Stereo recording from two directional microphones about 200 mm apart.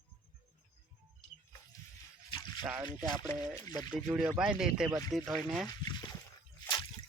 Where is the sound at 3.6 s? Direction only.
20° left (ahead or behind).